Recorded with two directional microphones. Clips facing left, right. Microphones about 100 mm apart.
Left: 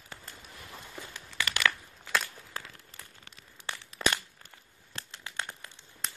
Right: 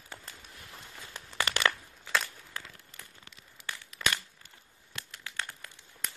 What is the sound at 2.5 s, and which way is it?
Crumpling, 30° left (ahead or behind).